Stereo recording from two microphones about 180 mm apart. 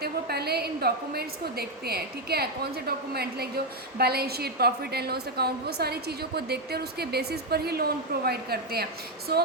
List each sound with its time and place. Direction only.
0.0 s a woman's voice: 60° right (ahead or behind)